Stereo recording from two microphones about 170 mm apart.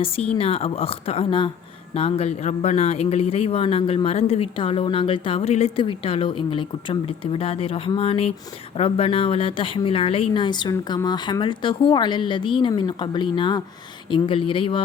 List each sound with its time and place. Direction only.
0.3 s speech: 35° left (ahead or behind)